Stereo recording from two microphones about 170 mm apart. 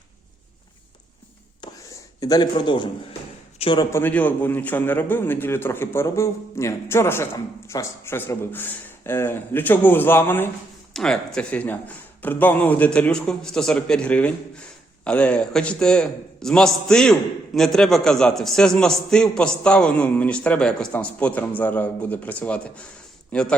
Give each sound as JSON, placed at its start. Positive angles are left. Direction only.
{"t": 1.6, "sound": "whispering", "side_deg": 25}
{"t": 2.2, "sound": "a man's voice", "side_deg": 25}
{"t": 3.9, "sound": "a man's voice", "side_deg": 10}